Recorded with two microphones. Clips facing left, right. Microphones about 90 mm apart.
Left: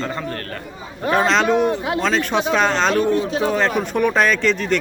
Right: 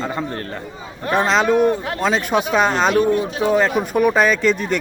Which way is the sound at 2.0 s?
10° right (ahead or behind).